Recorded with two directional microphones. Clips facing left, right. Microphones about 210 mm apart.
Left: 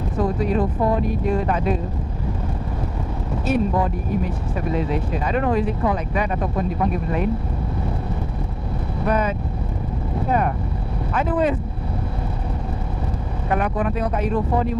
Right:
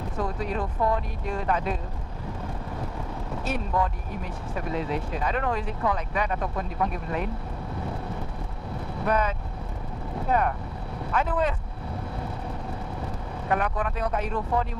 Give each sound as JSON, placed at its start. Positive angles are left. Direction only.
{"t": 0.2, "sound": "speech", "side_deg": 10}
{"t": 3.4, "sound": "speech", "side_deg": 10}
{"t": 9.0, "sound": "speech", "side_deg": 10}
{"t": 13.5, "sound": "speech", "side_deg": 10}